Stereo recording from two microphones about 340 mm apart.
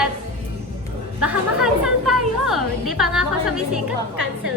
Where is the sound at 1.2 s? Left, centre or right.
Centre.